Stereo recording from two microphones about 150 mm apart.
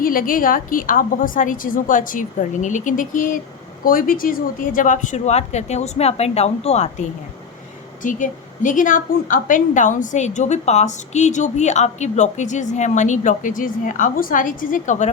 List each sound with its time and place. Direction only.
0.0 s a woman's voice: 70° left (ahead or behind); by 6.9 s 45° left (ahead or behind)
8.0 s a woman's voice: 60° left (ahead or behind)